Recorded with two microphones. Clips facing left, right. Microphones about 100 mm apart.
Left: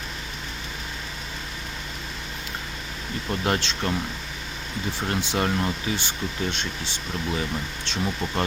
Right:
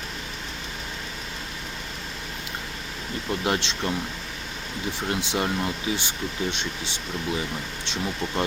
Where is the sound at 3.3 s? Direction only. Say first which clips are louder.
Even; 10° right (ahead or behind).